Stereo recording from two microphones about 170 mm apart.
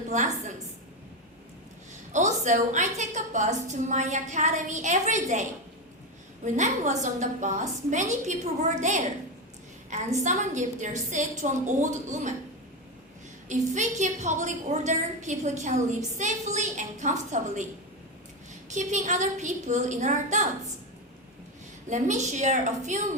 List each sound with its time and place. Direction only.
0.1 s a woman's voice: 45° right (ahead or behind)
2.1 s a woman's voice: 45° right (ahead or behind)
13.5 s a woman's voice: 45° right (ahead or behind)
18.7 s a woman's voice: 45° right (ahead or behind)
21.8 s a woman's voice: 45° right (ahead or behind)